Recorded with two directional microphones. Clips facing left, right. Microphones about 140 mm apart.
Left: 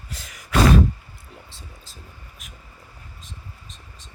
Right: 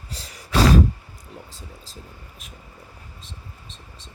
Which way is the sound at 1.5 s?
35° right (ahead or behind).